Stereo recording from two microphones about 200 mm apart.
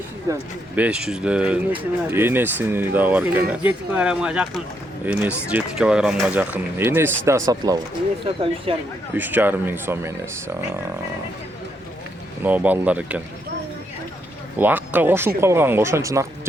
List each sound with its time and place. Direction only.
0.3 s speech: 15° right (ahead or behind)
0.8 s speech: 5° right (ahead or behind); by 8.7 s 25° right (ahead or behind)
9.1 s speech: 10° right (ahead or behind)
12.4 s speech: 10° right (ahead or behind)
14.6 s speech: 10° right (ahead or behind)